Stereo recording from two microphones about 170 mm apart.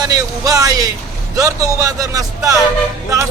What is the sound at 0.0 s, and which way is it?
A man's voice, 20° right (ahead or behind).